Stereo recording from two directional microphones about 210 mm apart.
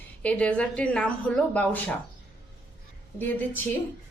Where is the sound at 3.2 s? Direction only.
10° left (ahead or behind).